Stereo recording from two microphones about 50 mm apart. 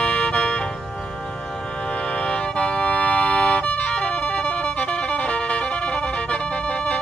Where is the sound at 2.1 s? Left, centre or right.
Left.